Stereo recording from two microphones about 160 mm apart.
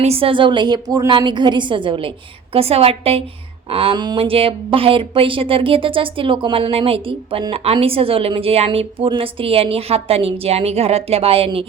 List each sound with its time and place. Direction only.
0.0 s speech: 35° right (ahead or behind)